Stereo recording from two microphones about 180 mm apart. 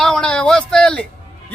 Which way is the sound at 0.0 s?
5° left (ahead or behind).